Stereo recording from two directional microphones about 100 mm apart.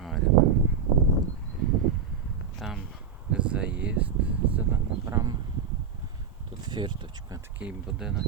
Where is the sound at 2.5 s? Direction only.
Centre (ahead or behind).